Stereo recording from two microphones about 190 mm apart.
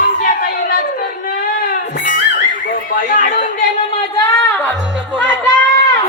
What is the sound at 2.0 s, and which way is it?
Music, 45° left (ahead or behind).